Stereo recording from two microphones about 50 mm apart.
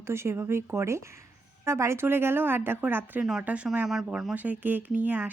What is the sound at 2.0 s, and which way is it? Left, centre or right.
Speech, right.